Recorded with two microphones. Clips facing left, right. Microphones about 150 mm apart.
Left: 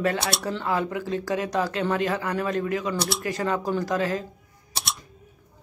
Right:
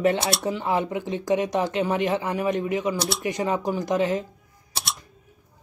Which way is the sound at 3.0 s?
Centre (ahead or behind).